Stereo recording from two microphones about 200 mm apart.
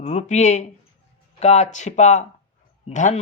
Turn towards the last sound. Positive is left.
turn(degrees=35)  # may be behind; listen again after turning